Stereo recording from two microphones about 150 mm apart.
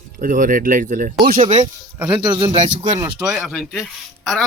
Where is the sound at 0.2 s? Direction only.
60° right (ahead or behind).